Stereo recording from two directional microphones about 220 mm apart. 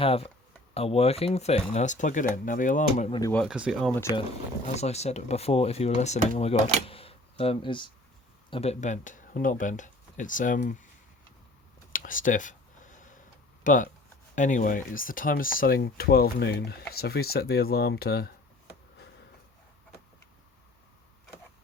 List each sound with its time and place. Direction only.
0.0 s speech: 25° left (ahead or behind)
3.1 s speech: 15° left (ahead or behind)
3.3 s speech: centre (ahead or behind)
4.6 s speech: 30° left (ahead or behind)
11.9 s a sound: 40° left (ahead or behind)
13.7 s speech: 35° left (ahead or behind)